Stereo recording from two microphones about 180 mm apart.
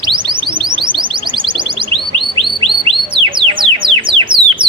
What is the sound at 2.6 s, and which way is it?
Music, 30° right (ahead or behind).